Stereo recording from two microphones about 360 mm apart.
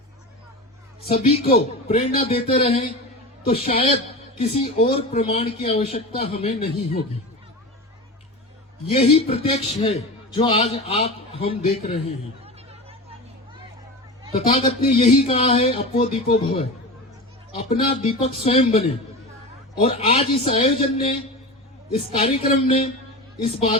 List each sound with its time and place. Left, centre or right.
1.1 s a woman's voice: centre
8.9 s a woman's voice: centre
14.3 s a woman's voice: centre
17.7 s a woman's voice: centre